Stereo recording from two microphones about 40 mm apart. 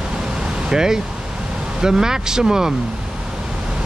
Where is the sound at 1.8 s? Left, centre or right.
Centre.